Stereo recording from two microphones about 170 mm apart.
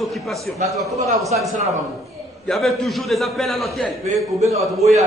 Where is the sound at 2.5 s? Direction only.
Centre (ahead or behind).